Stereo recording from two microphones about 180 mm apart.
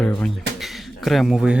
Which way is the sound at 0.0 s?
5° left (ahead or behind).